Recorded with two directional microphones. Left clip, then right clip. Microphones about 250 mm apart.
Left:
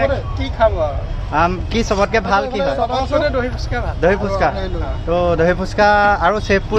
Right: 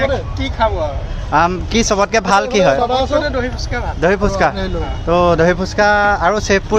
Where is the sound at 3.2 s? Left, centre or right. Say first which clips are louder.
Left 1 dB; centre.